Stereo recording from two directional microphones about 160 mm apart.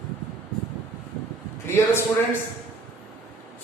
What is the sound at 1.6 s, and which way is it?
Speech, 15° left (ahead or behind).